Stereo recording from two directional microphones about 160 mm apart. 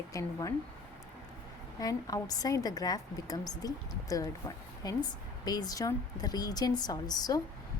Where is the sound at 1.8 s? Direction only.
20° left (ahead or behind).